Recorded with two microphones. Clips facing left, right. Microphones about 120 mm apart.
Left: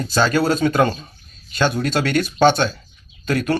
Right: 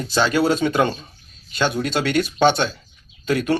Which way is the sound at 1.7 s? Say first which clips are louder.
Left 1 dB; 20° right (ahead or behind).